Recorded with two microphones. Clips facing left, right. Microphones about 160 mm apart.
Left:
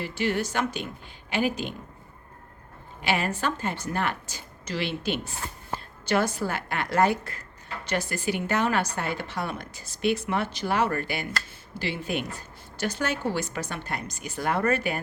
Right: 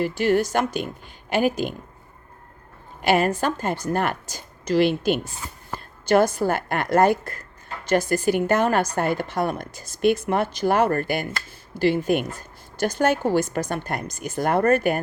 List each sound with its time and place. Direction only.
0.0 s a woman's voice: 45° right (ahead or behind)
3.0 s a woman's voice: 45° right (ahead or behind)